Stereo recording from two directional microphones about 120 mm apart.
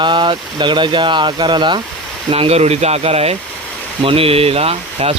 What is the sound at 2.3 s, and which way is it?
Speech, 55° right (ahead or behind).